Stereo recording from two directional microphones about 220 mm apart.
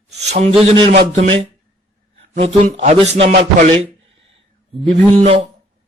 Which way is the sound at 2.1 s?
30° right (ahead or behind).